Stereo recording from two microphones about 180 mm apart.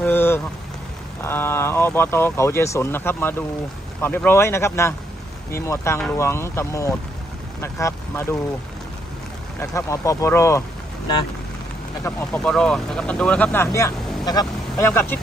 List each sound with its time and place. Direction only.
0.0 s rain on surface: 10° left (ahead or behind)
1.2 s speech: 15° left (ahead or behind)
9.6 s speech: 15° left (ahead or behind)
12.0 s speech: 5° left (ahead or behind)